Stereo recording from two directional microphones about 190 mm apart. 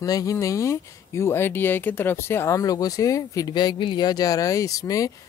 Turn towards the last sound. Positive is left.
turn(degrees=20)  # may be behind; listen again after turning